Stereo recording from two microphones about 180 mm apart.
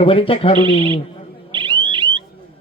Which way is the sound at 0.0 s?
30° left (ahead or behind).